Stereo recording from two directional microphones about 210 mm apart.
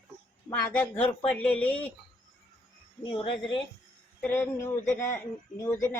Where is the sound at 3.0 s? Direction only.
25° left (ahead or behind).